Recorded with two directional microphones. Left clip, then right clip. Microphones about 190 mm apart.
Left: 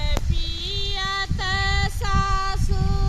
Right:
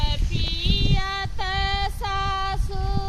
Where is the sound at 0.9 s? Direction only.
40° right (ahead or behind).